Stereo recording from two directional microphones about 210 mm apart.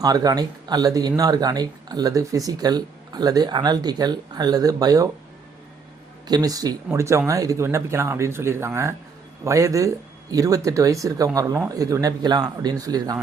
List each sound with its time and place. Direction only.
0.0 s speech: 15° right (ahead or behind)
6.2 s speech: 20° right (ahead or behind)